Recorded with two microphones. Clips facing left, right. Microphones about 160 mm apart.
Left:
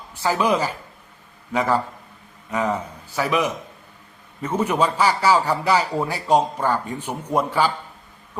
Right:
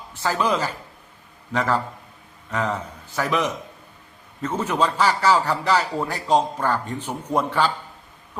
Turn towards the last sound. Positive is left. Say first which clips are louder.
# left 1 dB
turn(degrees=10)  # may be behind; listen again after turning